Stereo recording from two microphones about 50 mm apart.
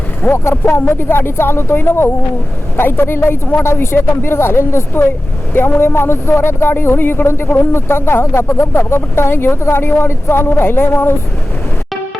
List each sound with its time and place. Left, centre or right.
0.5 s speech: left
0.9 s speech: left